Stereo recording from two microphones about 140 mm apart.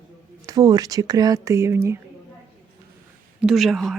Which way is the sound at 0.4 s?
25° right (ahead or behind).